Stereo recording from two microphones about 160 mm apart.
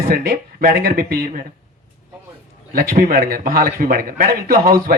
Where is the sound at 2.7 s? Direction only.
65° right (ahead or behind).